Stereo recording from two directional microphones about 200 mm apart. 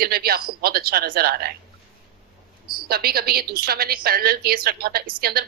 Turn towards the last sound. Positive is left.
turn(degrees=-50)  # may be behind; listen again after turning